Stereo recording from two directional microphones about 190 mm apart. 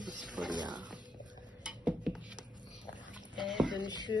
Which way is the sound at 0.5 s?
20° right (ahead or behind).